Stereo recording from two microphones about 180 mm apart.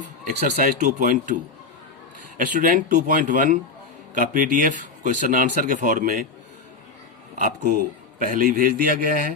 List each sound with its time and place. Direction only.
0.0 s speech: 40° right (ahead or behind)
2.4 s speech: 50° right (ahead or behind)
7.3 s speech: 50° right (ahead or behind)